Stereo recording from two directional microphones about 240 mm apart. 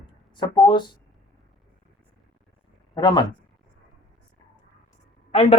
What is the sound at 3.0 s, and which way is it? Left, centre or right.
Speech, centre.